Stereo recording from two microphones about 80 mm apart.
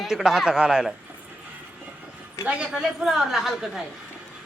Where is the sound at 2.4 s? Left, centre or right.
Centre.